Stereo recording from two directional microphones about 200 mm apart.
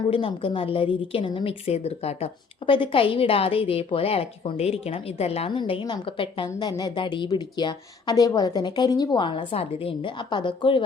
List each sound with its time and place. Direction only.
0.1 s a woman's voice: 25° left (ahead or behind)